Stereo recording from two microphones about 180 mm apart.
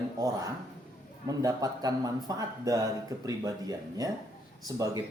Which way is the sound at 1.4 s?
20° right (ahead or behind).